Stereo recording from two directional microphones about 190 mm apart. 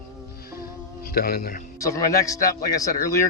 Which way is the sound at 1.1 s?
50° left (ahead or behind).